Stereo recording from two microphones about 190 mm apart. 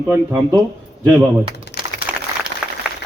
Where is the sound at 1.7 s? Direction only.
65° left (ahead or behind).